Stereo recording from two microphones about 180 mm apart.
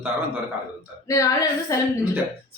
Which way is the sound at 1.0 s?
20° left (ahead or behind).